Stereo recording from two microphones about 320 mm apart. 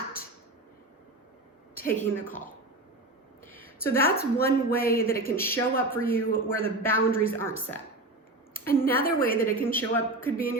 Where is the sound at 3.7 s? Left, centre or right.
Left.